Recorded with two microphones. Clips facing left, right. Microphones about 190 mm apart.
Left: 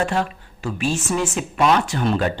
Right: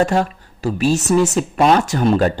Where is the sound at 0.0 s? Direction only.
40° right (ahead or behind).